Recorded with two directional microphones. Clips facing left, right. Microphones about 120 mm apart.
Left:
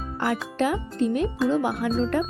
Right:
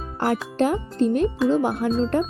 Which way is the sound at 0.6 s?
35° right (ahead or behind).